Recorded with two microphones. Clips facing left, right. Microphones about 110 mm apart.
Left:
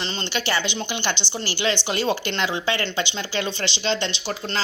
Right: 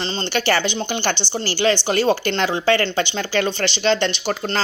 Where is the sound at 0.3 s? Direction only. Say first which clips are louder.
Right 6 dB; 50° right (ahead or behind).